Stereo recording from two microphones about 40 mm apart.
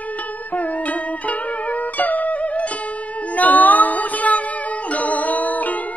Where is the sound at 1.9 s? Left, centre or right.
Left.